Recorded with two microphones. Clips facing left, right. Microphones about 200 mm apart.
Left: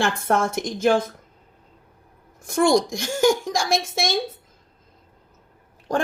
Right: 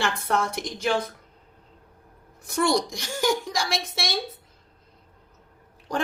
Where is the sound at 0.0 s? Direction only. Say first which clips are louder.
Left 4 dB; 50° left (ahead or behind).